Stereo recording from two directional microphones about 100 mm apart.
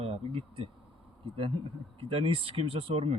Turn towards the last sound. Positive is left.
turn(degrees=-70)  # may be behind; listen again after turning